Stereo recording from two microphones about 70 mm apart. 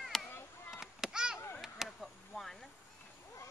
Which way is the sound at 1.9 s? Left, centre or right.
Centre.